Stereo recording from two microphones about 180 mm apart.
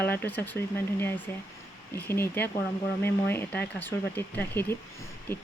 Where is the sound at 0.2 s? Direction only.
10° left (ahead or behind).